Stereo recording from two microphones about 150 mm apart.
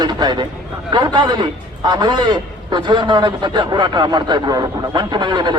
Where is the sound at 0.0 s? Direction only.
30° right (ahead or behind).